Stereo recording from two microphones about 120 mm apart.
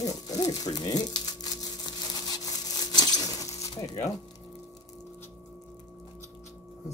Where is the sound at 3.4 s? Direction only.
25° left (ahead or behind).